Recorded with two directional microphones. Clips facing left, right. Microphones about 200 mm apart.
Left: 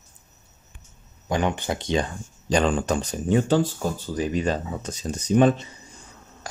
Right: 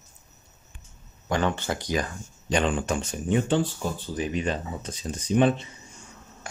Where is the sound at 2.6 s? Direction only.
40° left (ahead or behind).